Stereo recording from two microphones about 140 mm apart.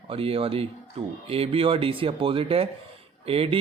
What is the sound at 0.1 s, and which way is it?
Speech, 40° right (ahead or behind).